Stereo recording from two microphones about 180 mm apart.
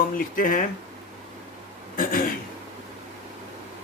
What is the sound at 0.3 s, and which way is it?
Speech, 50° left (ahead or behind).